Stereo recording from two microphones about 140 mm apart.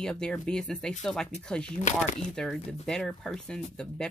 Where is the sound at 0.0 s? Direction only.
5° left (ahead or behind).